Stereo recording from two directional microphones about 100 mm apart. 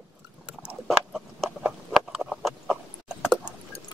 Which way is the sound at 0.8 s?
Centre (ahead or behind).